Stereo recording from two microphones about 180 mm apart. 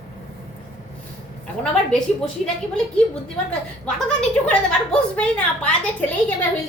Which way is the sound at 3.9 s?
5° left (ahead or behind).